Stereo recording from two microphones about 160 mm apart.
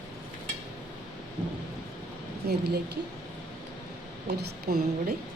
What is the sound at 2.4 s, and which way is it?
Speech, 80° right.